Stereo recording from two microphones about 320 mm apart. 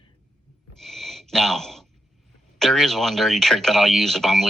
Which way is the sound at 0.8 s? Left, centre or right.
Centre.